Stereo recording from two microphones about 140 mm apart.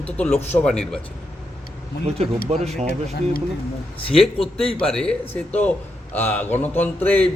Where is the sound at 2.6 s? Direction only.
55° right (ahead or behind).